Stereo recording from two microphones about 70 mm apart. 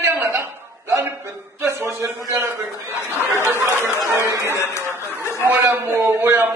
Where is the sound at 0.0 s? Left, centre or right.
Right.